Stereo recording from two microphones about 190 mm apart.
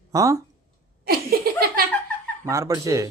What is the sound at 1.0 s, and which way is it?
Laughter, 50° right (ahead or behind).